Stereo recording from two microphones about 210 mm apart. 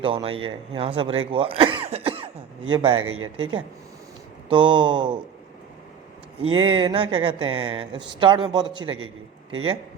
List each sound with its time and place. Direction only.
0.0 s speech: 25° right (ahead or behind)
6.6 s speech: 25° right (ahead or behind)